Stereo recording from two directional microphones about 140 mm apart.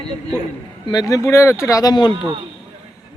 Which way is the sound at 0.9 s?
25° left (ahead or behind).